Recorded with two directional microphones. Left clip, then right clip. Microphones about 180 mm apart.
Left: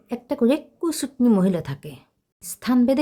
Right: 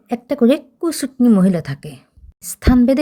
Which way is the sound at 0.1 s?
15° right (ahead or behind).